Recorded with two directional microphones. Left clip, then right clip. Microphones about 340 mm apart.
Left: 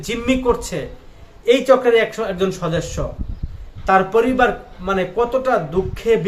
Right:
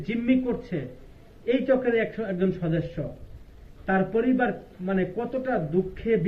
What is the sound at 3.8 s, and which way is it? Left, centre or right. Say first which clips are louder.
Speech: left 10 dB; left.